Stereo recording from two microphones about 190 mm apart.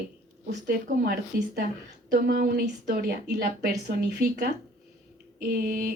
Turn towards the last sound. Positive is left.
turn(degrees=-50)  # may be behind; listen again after turning